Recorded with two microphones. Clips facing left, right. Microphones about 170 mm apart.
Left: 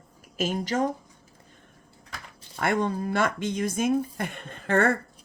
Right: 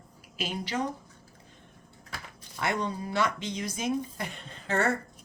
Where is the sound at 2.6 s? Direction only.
55° left (ahead or behind).